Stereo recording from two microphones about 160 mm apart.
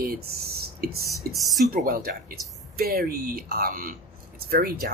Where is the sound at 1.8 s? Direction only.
65° right (ahead or behind).